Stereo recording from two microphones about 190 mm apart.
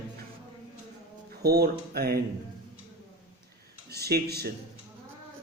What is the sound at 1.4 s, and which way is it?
Speech, 55° right (ahead or behind).